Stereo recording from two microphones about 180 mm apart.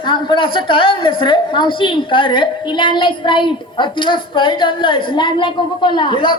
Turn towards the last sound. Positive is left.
turn(degrees=25)  # may be behind; listen again after turning